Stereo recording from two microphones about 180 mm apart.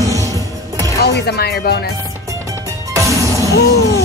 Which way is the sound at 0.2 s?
20° right (ahead or behind).